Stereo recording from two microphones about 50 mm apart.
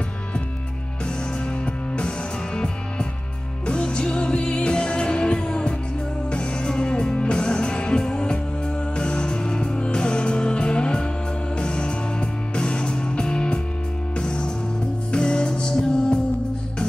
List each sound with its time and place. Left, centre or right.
2.0 s music: centre